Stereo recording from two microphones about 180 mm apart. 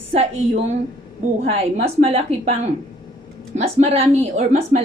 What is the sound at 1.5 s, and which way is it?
Speech, 35° right (ahead or behind).